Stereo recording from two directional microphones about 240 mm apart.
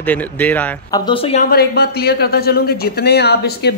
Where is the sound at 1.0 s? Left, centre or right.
Left.